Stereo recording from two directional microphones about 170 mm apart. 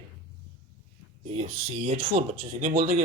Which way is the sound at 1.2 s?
35° right (ahead or behind).